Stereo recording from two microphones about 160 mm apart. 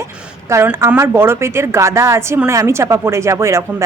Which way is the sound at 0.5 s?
15° right (ahead or behind).